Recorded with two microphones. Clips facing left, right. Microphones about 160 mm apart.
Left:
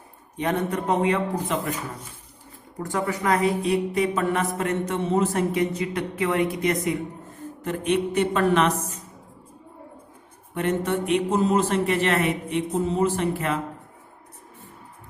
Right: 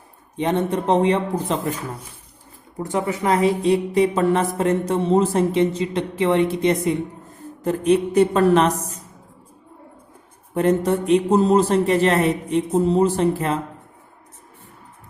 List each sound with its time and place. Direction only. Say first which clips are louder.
0.3 s a woman's voice: right 4 dB; 25° right (ahead or behind)
2.7 s a woman's voice: right 3 dB; 20° right (ahead or behind); by 9.0 s 35° right (ahead or behind)
10.5 s a man's voice: right 6 dB; 35° right (ahead or behind)